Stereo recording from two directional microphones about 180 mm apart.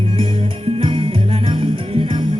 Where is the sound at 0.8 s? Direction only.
25° right (ahead or behind).